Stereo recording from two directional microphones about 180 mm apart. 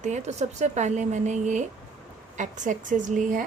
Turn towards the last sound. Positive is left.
turn(degrees=-45)  # may be behind; listen again after turning